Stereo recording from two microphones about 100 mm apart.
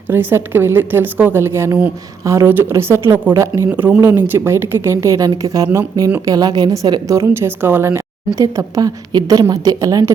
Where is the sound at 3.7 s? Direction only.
15° right (ahead or behind).